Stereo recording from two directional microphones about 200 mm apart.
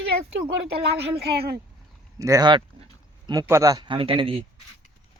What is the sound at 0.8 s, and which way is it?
Speech, 55° right (ahead or behind).